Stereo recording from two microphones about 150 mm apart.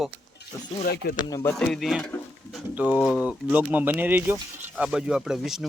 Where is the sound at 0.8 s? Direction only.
90° left.